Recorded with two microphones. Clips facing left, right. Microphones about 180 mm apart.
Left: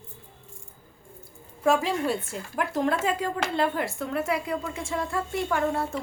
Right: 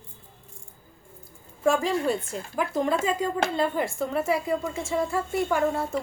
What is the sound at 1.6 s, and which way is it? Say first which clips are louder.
A woman's voice: right 1 dB; centre (ahead or behind).